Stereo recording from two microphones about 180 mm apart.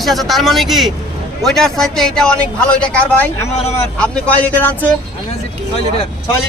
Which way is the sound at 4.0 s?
10° left (ahead or behind).